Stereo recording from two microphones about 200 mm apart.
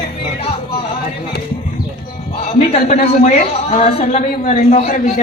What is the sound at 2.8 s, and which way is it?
A man's voice, 35° left (ahead or behind).